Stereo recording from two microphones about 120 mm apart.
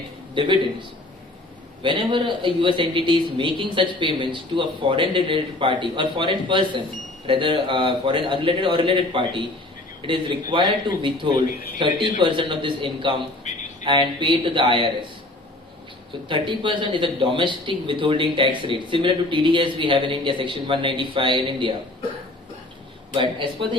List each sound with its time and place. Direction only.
0.3 s a man's voice: 40° right (ahead or behind)
13.5 s a sound: 80° left
13.8 s speech: 40° right (ahead or behind)
16.3 s speech: 40° right (ahead or behind)
23.1 s speech: 45° right (ahead or behind)